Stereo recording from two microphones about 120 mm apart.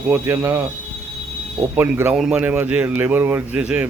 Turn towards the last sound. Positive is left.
turn(degrees=-10)  # may be behind; listen again after turning